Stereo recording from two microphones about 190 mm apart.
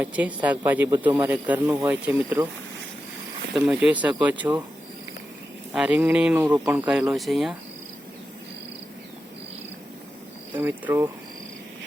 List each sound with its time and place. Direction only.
0.0 s speech: 10° right (ahead or behind)
3.5 s speech: 5° right (ahead or behind)
5.7 s speech: 5° right (ahead or behind)
10.5 s speech: 10° right (ahead or behind)